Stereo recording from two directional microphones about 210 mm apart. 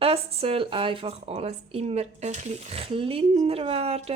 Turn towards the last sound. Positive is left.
turn(degrees=-30)  # may be behind; listen again after turning